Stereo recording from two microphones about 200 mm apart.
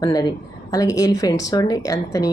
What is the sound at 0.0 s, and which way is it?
Speech, 20° left (ahead or behind).